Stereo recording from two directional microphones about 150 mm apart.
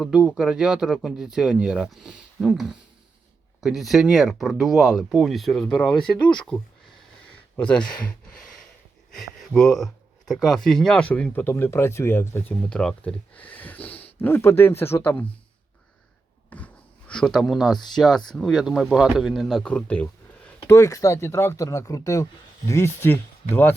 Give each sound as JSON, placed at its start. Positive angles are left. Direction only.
{"t": 0.0, "sound": "speech", "side_deg": 0}
{"t": 9.1, "sound": "speech", "side_deg": 0}
{"t": 17.1, "sound": "speech", "side_deg": 5}
{"t": 20.7, "sound": "speech", "side_deg": 20}